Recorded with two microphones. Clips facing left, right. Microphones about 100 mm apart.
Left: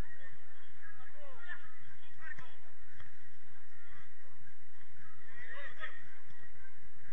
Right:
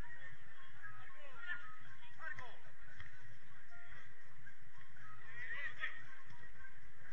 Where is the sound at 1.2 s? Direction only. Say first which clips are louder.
Even; 15° left (ahead or behind).